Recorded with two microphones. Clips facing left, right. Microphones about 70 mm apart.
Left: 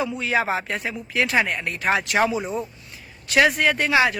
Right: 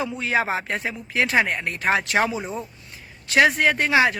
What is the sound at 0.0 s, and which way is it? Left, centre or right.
Speech, right.